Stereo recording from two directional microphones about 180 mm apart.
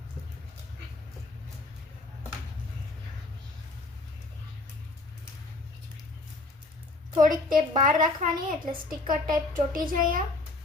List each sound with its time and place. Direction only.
7.2 s a woman's voice: 50° right (ahead or behind)